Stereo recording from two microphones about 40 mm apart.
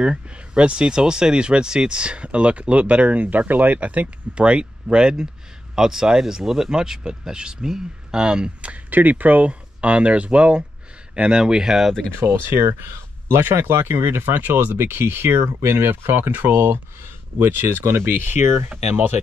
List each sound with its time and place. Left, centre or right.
0.0 s speech: right
4.4 s speech: right
8.9 s speech: right; by 11.9 s centre
12.2 s speech: right
13.4 s speech: right